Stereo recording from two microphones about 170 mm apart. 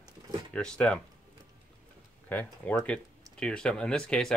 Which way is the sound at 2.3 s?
10° left (ahead or behind).